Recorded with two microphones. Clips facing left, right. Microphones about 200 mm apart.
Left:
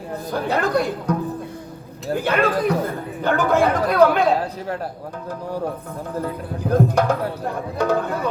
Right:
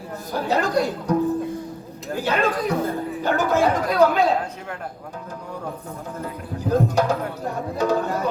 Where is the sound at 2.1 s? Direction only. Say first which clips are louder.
Left 2 dB; 55° left (ahead or behind).